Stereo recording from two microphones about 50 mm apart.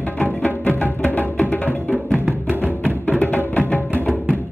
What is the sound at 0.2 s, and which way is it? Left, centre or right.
Music, left.